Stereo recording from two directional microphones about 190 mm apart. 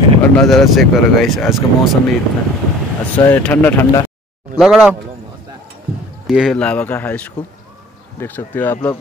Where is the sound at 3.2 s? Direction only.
10° left (ahead or behind).